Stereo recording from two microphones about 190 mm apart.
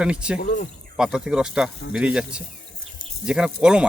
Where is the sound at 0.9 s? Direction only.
5° right (ahead or behind).